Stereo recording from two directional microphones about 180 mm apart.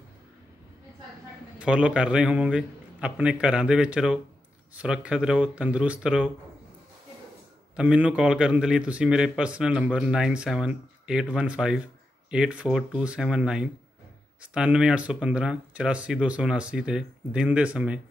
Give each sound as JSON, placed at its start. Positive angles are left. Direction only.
{"t": 1.6, "sound": "a man's voice", "side_deg": -5}
{"t": 7.7, "sound": "a man's voice", "side_deg": -5}